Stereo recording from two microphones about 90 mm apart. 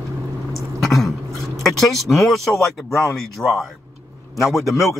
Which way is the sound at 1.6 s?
5° left (ahead or behind).